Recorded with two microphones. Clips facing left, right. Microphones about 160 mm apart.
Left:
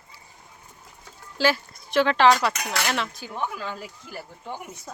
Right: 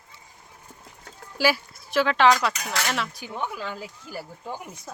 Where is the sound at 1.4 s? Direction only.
10° right (ahead or behind).